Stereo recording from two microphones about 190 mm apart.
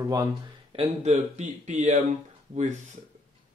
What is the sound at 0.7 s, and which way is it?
Speech, 35° right (ahead or behind).